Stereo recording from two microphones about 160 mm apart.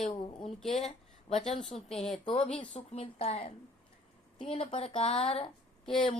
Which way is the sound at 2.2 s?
35° left (ahead or behind).